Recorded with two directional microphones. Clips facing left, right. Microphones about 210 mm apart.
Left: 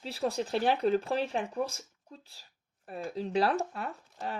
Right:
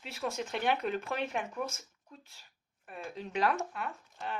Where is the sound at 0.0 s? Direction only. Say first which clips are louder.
Left 5 dB; 35° left (ahead or behind).